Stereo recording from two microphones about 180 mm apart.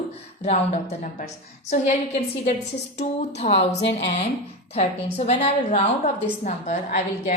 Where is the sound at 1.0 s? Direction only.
45° left (ahead or behind).